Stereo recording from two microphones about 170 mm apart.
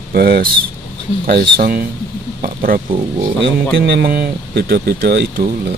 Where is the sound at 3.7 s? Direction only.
75° right (ahead or behind).